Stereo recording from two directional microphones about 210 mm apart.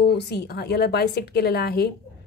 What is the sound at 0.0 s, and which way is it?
Speech, 50° left (ahead or behind).